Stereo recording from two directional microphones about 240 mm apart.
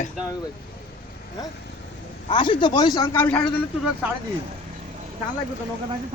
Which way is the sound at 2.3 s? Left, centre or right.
Left.